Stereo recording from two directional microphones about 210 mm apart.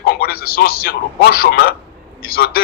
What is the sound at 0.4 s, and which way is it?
A man's voice, 45° left (ahead or behind).